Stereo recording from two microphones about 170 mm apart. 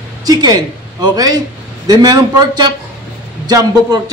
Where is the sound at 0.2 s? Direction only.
20° right (ahead or behind).